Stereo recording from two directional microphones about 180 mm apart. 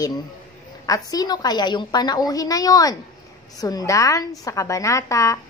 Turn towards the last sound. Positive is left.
turn(degrees=15)  # may be behind; listen again after turning